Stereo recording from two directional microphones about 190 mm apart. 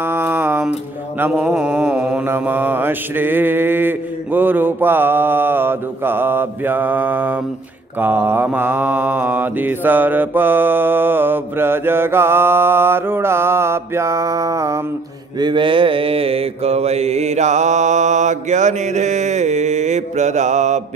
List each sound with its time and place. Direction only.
0.0 s music: 10° right (ahead or behind)
1.2 s mantra: 5° right (ahead or behind); by 20.8 s 40° right (ahead or behind)